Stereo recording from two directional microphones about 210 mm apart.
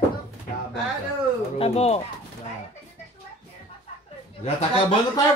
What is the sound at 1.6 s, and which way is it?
Speech, 30° left (ahead or behind).